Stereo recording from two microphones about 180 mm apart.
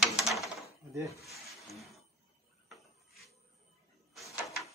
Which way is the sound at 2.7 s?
Centre (ahead or behind).